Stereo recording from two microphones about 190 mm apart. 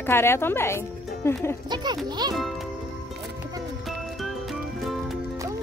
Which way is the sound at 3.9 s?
Centre (ahead or behind).